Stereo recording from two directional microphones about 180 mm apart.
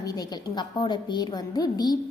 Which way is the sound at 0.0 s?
20° left (ahead or behind).